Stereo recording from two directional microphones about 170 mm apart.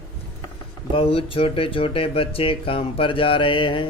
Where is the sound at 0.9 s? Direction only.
35° left (ahead or behind).